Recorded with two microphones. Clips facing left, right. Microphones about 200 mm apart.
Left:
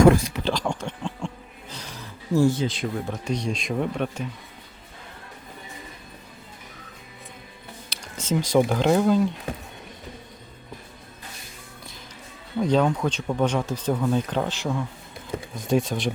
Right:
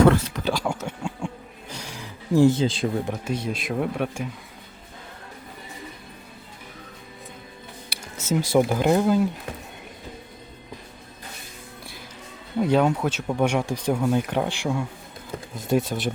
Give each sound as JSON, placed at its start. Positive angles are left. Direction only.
{"t": 0.0, "sound": "speech", "side_deg": 10}
{"t": 0.4, "sound": "a sound", "side_deg": -5}
{"t": 3.1, "sound": "speech", "side_deg": -5}
{"t": 7.9, "sound": "speech", "side_deg": -5}
{"t": 12.5, "sound": "speech", "side_deg": -10}